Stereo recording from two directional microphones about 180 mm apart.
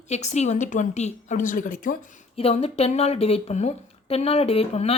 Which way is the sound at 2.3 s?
35° left (ahead or behind).